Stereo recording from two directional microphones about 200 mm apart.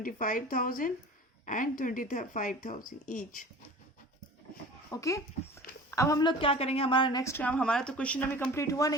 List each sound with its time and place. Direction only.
0.0 s a woman's voice: 45° left (ahead or behind)
4.9 s a woman's voice: 15° left (ahead or behind)